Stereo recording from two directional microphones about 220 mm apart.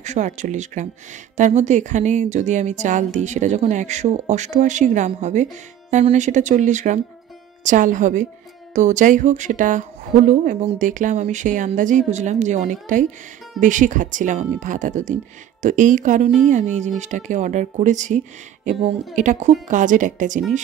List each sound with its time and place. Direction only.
0.0 s speech: 35° right (ahead or behind)